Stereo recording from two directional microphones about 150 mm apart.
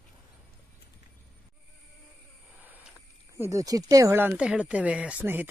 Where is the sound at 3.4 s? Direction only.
20° right (ahead or behind).